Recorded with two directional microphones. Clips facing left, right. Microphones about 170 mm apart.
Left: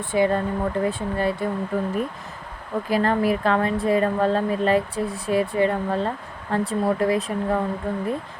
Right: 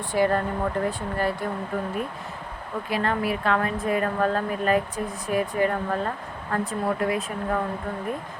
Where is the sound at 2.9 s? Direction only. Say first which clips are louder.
Left 5 dB; 35° left (ahead or behind).